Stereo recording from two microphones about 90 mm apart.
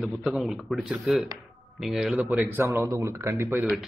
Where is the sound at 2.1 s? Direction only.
15° right (ahead or behind).